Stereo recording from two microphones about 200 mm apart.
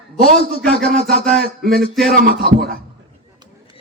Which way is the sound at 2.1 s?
50° right (ahead or behind).